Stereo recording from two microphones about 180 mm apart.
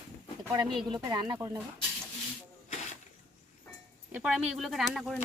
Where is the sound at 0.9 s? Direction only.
25° right (ahead or behind).